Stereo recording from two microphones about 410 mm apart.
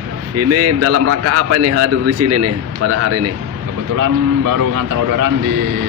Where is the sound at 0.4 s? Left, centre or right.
Right.